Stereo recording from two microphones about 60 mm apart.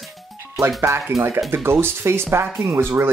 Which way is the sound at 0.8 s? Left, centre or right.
Right.